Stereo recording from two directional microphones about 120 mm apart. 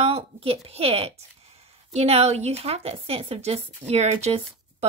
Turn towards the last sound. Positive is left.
turn(degrees=-65)  # may be behind; listen again after turning